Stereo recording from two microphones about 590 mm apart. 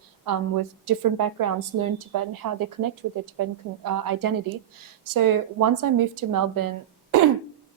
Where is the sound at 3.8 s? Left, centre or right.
Right.